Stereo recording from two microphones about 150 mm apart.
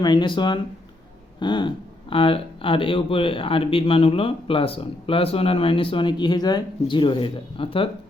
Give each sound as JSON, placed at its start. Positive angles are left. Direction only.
{"t": 0.0, "sound": "speech", "side_deg": 30}